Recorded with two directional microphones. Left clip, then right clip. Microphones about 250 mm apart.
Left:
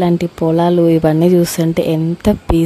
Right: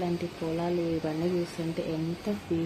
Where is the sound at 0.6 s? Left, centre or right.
Left.